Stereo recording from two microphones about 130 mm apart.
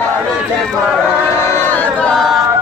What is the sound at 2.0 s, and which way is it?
Yodeling, 5° left (ahead or behind).